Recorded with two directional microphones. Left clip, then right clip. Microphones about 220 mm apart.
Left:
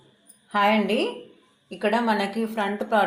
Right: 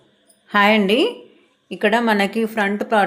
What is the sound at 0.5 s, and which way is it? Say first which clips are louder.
Speech: right 6 dB; 40° right (ahead or behind).